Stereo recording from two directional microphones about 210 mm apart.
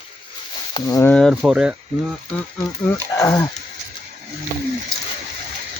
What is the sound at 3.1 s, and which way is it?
Speech, 15° left (ahead or behind).